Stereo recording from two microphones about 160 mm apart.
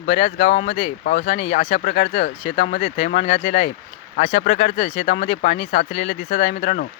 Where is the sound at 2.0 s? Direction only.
90° left.